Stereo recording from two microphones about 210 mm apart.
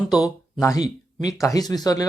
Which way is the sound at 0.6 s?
15° left (ahead or behind).